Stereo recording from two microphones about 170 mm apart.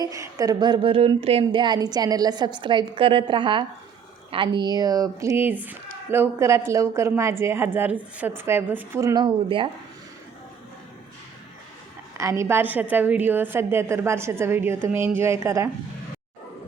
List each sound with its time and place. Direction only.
0.0 s a woman's voice: 20° right (ahead or behind)
12.1 s speech: 15° right (ahead or behind)